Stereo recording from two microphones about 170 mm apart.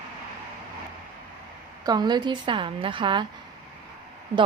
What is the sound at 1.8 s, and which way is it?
Speech, 25° right (ahead or behind).